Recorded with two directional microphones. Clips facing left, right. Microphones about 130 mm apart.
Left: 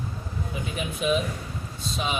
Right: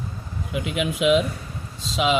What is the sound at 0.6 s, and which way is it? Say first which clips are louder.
Speech: right 8 dB; 90° right.